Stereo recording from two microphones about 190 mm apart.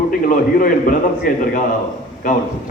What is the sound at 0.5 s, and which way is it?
A man's voice, 45° left (ahead or behind).